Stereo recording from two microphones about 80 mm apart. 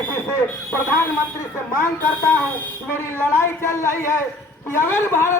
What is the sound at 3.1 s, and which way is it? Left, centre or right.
A man's voice, left.